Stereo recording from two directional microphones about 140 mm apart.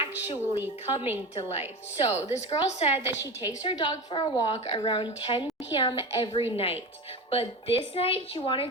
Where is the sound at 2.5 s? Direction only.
50° left (ahead or behind).